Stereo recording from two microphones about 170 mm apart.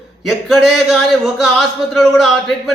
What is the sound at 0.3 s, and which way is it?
A man's voice, centre (ahead or behind).